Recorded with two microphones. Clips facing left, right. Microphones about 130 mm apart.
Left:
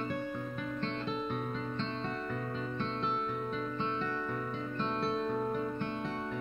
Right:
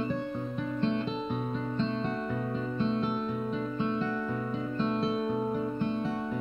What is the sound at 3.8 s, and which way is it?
Music, 10° right (ahead or behind).